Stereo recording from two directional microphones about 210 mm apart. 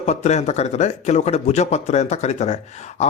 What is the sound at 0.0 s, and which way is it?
Speech, 30° left (ahead or behind).